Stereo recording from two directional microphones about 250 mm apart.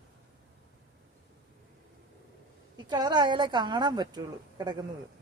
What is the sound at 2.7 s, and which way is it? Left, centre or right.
A woman's voice, centre.